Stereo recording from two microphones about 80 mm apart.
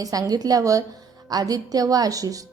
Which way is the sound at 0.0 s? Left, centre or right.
Right.